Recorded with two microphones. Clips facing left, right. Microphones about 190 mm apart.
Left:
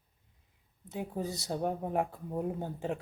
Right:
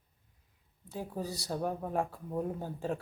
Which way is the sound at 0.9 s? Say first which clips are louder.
Left 2 dB; 20° left (ahead or behind).